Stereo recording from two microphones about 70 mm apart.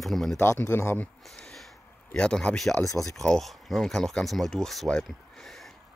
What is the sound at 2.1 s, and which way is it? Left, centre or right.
Speech, centre.